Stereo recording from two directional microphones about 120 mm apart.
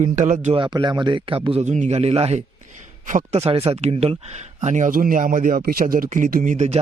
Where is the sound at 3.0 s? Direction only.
75° right (ahead or behind).